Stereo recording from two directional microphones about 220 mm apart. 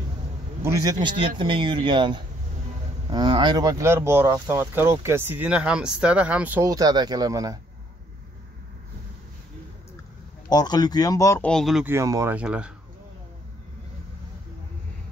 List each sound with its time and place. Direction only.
0.6 s speech: 15° right (ahead or behind)
10.5 s speech: 20° left (ahead or behind); by 12.7 s 5° right (ahead or behind)